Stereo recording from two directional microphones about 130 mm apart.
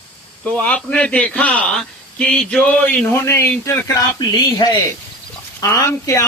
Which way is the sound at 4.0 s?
30° left (ahead or behind).